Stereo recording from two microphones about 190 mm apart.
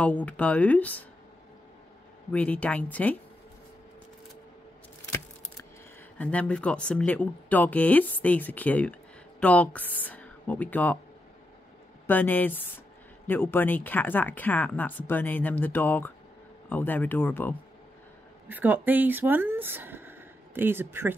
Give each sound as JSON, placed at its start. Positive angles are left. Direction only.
{"t": 0.0, "sound": "speech", "side_deg": 5}
{"t": 2.3, "sound": "speech", "side_deg": 5}
{"t": 5.0, "sound": "keys jangling", "side_deg": 15}
{"t": 6.1, "sound": "speech", "side_deg": 5}
{"t": 12.1, "sound": "speech", "side_deg": 10}
{"t": 18.5, "sound": "speech", "side_deg": -10}